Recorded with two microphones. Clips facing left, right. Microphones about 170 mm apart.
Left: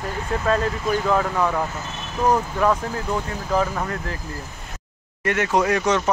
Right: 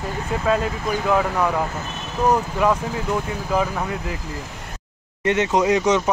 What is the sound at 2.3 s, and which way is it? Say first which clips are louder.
Speech: even; 10° right (ahead or behind).